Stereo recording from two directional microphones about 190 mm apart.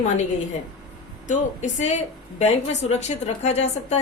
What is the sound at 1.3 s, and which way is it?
A woman's voice, 40° left (ahead or behind).